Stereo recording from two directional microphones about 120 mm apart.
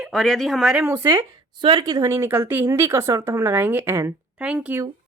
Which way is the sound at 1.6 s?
40° right (ahead or behind).